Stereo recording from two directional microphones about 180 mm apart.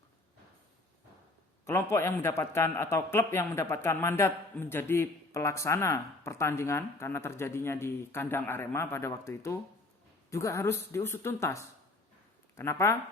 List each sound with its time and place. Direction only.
1.6 s a man's voice: 15° left (ahead or behind)